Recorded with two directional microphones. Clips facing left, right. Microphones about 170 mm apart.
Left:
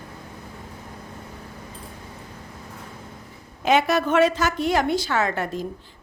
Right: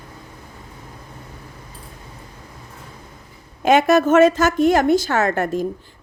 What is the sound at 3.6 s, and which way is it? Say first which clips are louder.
A woman's voice: right 5 dB; 50° right (ahead or behind).